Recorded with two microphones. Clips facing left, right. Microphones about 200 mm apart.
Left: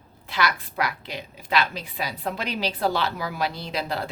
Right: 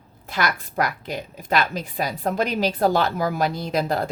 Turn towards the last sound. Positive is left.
turn(degrees=-45)  # may be behind; listen again after turning